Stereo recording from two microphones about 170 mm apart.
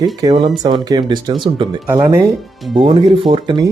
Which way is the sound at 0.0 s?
20° right (ahead or behind).